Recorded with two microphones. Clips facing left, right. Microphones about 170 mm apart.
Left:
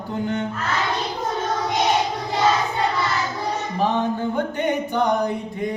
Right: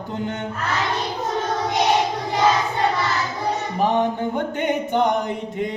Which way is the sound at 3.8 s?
15° right (ahead or behind).